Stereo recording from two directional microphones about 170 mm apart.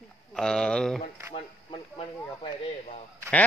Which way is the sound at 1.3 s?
35° left (ahead or behind).